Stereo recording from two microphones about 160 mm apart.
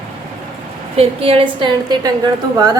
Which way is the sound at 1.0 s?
35° right (ahead or behind).